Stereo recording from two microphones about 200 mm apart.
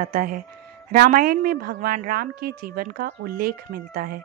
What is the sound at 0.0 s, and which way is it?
A woman's voice, 45° right (ahead or behind).